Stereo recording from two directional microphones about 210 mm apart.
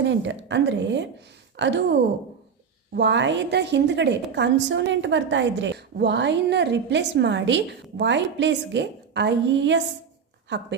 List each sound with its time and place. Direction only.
0.0 s a woman's voice: 60° right (ahead or behind)
2.9 s a woman's voice: 55° right (ahead or behind)